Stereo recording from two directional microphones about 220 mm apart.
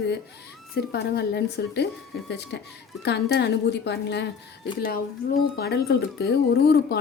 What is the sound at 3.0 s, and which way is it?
Speech, 50° left (ahead or behind).